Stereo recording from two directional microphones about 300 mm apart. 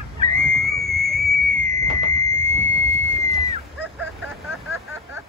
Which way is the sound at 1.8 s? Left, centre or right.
Right.